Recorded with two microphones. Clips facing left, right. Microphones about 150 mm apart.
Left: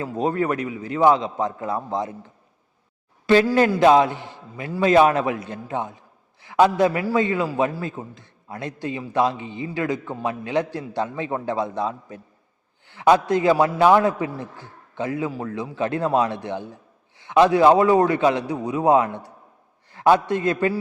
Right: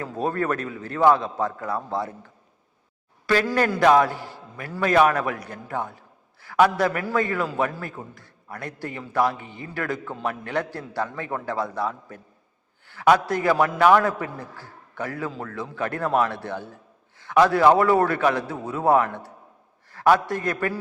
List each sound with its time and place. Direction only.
0.0 s a man's voice: 15° left (ahead or behind)
3.4 s a man's voice: 10° left (ahead or behind)
3.8 s a man's voice: 20° left (ahead or behind)